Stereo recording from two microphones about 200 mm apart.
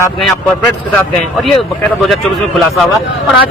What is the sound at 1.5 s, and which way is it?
Speech, centre (ahead or behind).